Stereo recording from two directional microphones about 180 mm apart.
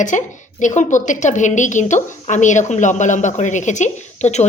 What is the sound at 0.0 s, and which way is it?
A woman's voice, 45° left (ahead or behind).